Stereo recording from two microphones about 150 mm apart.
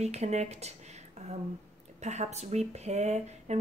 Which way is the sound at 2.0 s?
50° right (ahead or behind).